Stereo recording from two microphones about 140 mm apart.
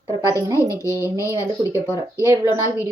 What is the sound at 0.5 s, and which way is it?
Speech, 20° left (ahead or behind).